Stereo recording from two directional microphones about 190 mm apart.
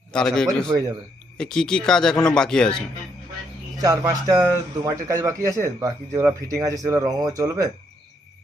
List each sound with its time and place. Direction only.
0.1 s speech: 5° left (ahead or behind)
3.8 s speech: 20° right (ahead or behind)